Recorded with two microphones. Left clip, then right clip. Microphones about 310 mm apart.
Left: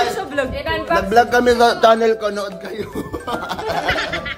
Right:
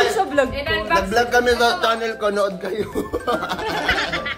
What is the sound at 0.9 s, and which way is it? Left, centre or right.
Speech, left.